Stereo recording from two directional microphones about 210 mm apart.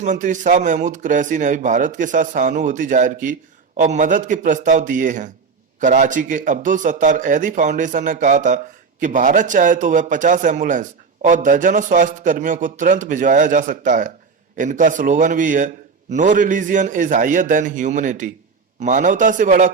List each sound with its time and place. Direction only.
0.0 s speech: 35° right (ahead or behind)